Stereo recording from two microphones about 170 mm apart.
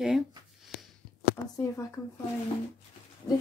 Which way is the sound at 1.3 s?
20° left (ahead or behind).